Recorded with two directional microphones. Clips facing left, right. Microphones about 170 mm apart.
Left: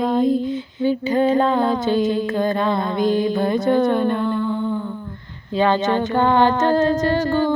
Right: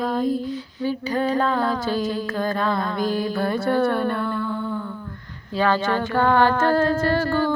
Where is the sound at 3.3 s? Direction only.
20° left (ahead or behind).